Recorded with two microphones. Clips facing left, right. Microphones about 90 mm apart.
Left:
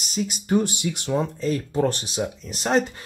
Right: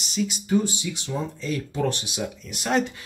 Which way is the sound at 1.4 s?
40° left (ahead or behind).